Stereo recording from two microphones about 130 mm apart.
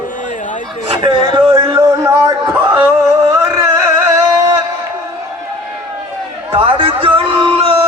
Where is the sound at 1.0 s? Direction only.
35° right (ahead or behind).